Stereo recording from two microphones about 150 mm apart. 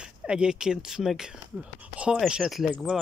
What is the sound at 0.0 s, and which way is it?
Speech, 5° right (ahead or behind).